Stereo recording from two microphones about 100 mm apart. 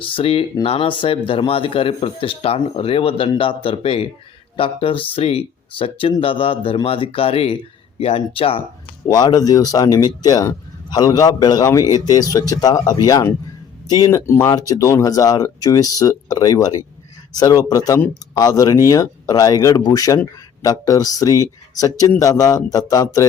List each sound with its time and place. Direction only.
0.0 s speech: 65° left (ahead or behind)
5.1 s speech: 75° left (ahead or behind)
9.0 s speech: 40° left (ahead or behind)